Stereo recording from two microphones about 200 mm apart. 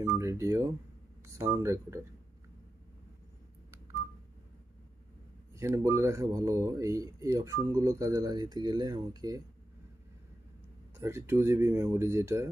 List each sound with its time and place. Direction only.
0.0 s speech: 15° right (ahead or behind)
5.6 s speech: 15° right (ahead or behind)
11.0 s speech: 15° right (ahead or behind)